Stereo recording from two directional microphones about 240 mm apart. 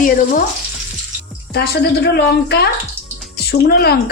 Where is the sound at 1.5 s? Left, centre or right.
Left.